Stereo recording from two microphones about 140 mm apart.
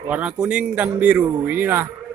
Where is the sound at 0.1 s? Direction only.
10° right (ahead or behind).